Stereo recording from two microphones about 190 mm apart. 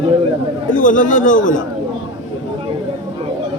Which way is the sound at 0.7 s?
45° left (ahead or behind).